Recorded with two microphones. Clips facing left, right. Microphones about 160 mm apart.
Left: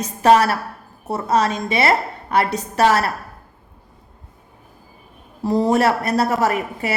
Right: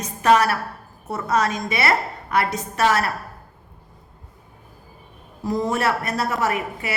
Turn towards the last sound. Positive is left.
turn(degrees=35)  # may be behind; listen again after turning